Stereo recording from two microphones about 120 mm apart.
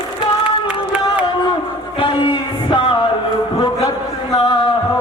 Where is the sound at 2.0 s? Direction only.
45° left (ahead or behind).